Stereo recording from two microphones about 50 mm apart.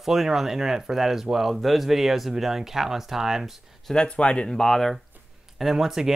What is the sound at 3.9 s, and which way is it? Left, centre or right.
Speech, centre.